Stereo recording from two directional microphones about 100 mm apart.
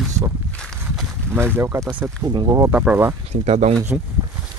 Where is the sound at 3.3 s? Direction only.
90° right.